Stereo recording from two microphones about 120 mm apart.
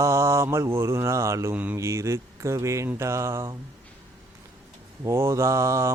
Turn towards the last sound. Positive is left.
turn(degrees=-25)  # may be behind; listen again after turning